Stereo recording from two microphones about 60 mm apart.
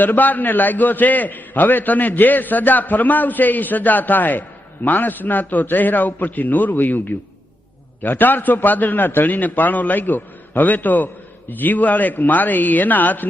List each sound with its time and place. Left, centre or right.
0.0 s a man's voice: left